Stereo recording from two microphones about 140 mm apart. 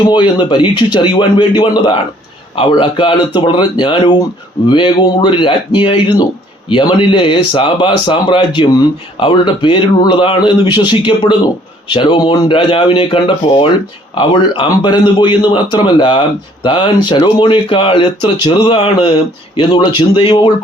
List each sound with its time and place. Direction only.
0.0 s speech: 35° left (ahead or behind)